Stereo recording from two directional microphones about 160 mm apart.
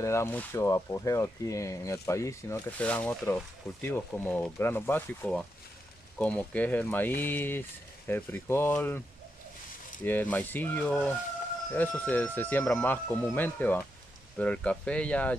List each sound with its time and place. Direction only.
0.0 s speech: 15° left (ahead or behind)
10.3 s speech: 10° left (ahead or behind)